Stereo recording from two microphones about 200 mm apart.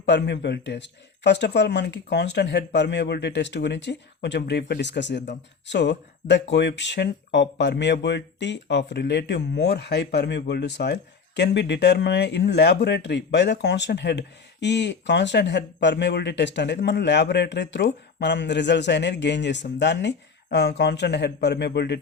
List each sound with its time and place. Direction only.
0.0 s speech: 60° left (ahead or behind)